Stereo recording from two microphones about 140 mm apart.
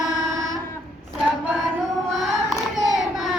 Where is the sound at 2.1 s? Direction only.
Centre (ahead or behind).